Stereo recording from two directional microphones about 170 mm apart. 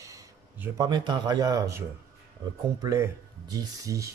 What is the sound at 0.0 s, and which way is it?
Speech, 20° right (ahead or behind).